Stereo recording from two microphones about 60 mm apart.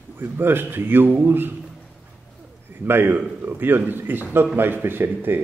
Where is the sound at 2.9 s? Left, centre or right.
Right.